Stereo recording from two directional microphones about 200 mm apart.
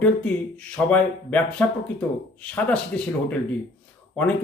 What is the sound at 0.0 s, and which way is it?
Speech, 5° left (ahead or behind).